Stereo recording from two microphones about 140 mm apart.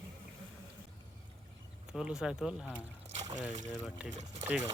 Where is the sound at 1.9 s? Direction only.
5° right (ahead or behind).